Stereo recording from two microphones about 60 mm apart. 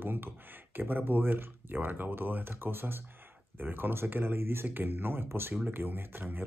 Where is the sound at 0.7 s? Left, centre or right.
Right.